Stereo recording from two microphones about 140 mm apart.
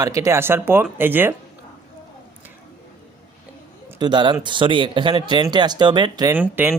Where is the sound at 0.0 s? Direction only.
25° right (ahead or behind).